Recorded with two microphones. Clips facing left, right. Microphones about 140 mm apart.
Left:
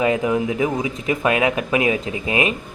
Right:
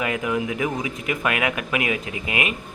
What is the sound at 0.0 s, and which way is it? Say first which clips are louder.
Speech: left 6 dB; 25° left (ahead or behind).